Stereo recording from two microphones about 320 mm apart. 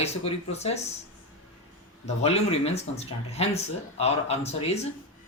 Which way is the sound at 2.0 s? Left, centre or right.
Centre.